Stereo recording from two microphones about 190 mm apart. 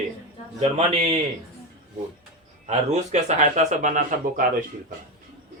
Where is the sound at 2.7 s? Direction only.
35° right (ahead or behind).